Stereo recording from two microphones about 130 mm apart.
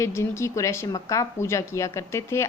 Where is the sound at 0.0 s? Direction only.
20° left (ahead or behind).